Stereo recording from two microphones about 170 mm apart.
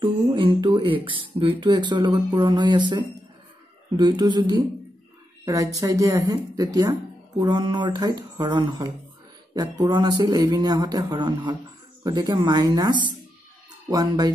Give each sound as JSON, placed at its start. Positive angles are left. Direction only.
{"t": 0.0, "sound": "a woman's voice", "side_deg": -30}